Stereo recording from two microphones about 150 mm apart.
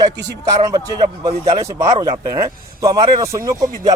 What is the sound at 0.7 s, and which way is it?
Speech, 25° right (ahead or behind).